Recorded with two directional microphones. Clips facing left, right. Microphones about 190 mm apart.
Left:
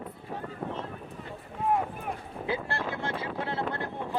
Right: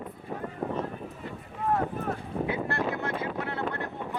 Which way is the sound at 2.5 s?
30° left (ahead or behind).